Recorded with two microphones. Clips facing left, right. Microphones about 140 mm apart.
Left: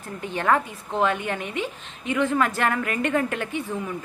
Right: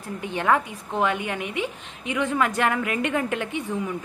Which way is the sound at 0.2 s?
15° right (ahead or behind).